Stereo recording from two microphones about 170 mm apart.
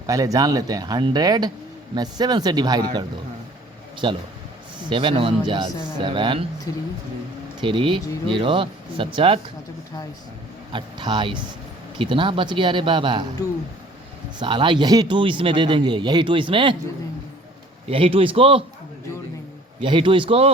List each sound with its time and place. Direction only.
0.1 s speech: 20° right (ahead or behind)
4.0 s speech: 30° right (ahead or behind)
7.6 s speech: 30° right (ahead or behind)
10.7 s speech: 30° right (ahead or behind)
14.3 s speech: 30° right (ahead or behind)
17.8 s speech: 35° right (ahead or behind)
19.8 s speech: 30° right (ahead or behind)